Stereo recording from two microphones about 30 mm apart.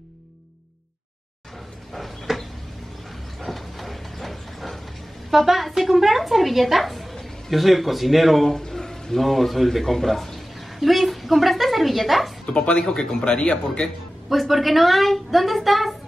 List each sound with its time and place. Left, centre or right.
2.3 s a sound: centre
3.3 s ratchet: centre
5.3 s a woman's voice: centre
8.5 s a sound: centre
9.2 s a woman's voice: centre
12.5 s speech: left
12.8 s speech: left
13.4 s speech: left
14.3 s a woman's voice: centre